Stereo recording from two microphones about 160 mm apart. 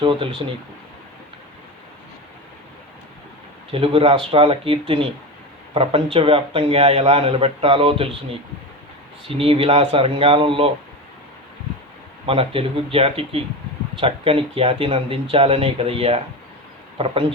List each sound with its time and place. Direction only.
0.0 s speech: 30° right (ahead or behind)
3.7 s speech: 35° right (ahead or behind)
9.2 s speech: 35° right (ahead or behind)
12.2 s speech: 35° right (ahead or behind)